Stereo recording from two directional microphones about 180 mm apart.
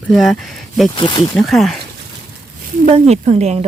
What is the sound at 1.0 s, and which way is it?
Speech, 25° left (ahead or behind).